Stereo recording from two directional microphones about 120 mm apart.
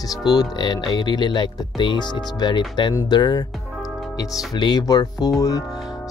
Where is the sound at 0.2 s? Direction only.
35° left (ahead or behind).